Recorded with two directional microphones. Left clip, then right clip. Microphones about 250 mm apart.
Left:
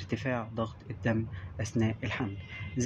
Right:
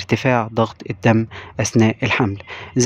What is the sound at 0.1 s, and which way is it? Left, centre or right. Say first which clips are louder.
Speech: right 16 dB; right.